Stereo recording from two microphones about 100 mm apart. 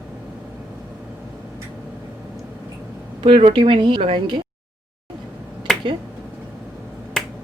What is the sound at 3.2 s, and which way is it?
Speech, 65° right (ahead or behind).